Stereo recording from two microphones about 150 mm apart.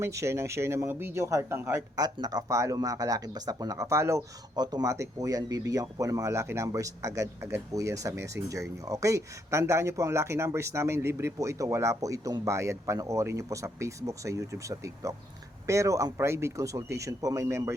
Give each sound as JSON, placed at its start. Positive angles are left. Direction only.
{"t": 0.0, "sound": "speech", "side_deg": -20}